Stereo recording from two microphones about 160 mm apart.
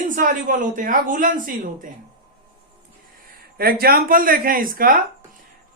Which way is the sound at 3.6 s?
70° right (ahead or behind).